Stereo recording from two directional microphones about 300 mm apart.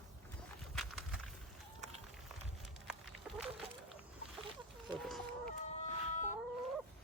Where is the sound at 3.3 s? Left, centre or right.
Centre.